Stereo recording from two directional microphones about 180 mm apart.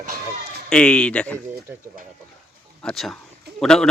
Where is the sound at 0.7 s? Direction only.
5° left (ahead or behind).